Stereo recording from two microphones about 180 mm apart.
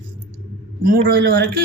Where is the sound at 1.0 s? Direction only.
90° right.